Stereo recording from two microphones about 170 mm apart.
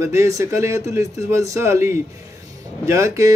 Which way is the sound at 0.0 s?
15° right (ahead or behind).